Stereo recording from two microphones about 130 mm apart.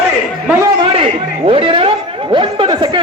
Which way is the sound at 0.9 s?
45° right (ahead or behind).